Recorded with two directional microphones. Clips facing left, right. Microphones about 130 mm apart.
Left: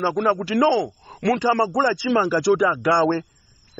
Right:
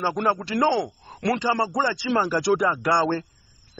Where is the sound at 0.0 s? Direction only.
Centre (ahead or behind).